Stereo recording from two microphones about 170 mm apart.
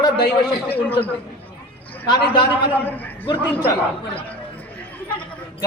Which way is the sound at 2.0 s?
30° left (ahead or behind).